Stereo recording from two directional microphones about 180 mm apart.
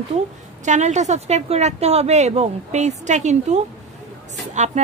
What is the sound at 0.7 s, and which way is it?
A woman's voice, 40° right (ahead or behind).